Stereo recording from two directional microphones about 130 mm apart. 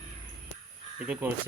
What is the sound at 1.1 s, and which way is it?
Speech, 15° right (ahead or behind).